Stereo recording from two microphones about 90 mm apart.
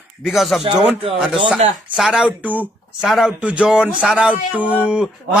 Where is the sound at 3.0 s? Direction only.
5° right (ahead or behind).